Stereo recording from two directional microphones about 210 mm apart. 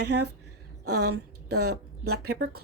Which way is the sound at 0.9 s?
90° right.